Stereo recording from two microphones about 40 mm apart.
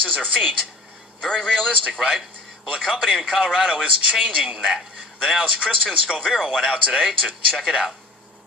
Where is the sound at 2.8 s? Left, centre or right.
Centre.